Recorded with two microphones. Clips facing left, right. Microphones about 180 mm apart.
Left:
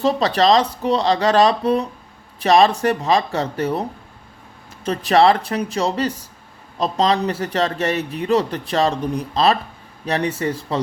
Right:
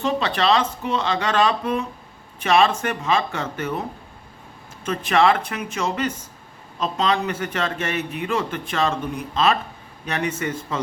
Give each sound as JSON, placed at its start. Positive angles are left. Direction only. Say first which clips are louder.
{"t": 0.0, "sound": "a man's voice", "louder": "left 5 dB", "side_deg": 35}